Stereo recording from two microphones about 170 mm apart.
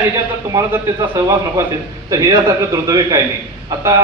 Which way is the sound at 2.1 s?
20° right (ahead or behind).